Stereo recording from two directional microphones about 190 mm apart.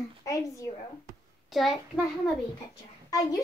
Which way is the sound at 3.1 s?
20° left (ahead or behind).